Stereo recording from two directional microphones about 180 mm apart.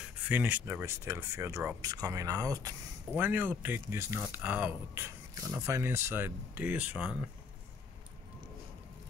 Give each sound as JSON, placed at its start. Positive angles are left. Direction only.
{"t": 0.3, "sound": "speech", "side_deg": -10}